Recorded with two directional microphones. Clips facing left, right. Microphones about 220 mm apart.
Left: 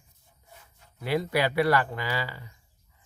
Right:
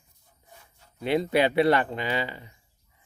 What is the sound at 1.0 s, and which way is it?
Speech, 20° right (ahead or behind).